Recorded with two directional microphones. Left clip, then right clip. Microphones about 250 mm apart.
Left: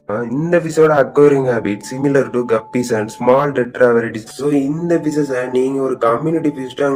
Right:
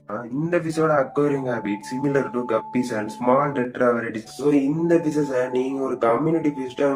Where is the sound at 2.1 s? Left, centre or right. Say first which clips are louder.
Left 8 dB; left.